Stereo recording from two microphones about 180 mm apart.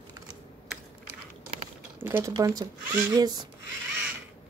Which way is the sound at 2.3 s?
25° right (ahead or behind).